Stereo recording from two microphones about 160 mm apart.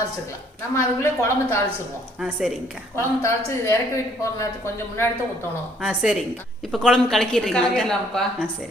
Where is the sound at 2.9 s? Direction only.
15° left (ahead or behind).